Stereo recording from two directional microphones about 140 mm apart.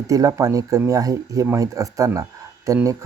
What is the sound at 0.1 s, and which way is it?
Speech, 25° right (ahead or behind).